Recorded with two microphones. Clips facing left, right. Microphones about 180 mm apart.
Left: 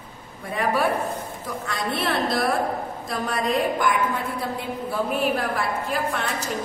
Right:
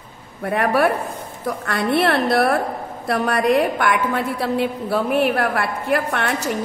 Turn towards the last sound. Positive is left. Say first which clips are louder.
# right 5 dB
turn(degrees=-65)  # may be behind; listen again after turning